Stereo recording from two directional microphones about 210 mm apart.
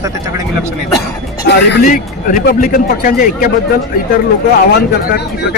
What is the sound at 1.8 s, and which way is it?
Speech, 40° left (ahead or behind).